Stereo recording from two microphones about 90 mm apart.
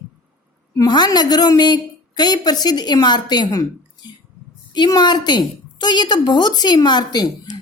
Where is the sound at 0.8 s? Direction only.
50° left (ahead or behind).